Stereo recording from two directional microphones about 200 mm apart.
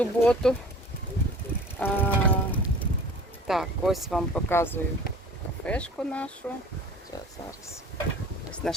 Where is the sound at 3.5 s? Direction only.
Centre (ahead or behind).